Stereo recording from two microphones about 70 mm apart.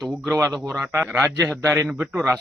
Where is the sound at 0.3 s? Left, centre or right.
Right.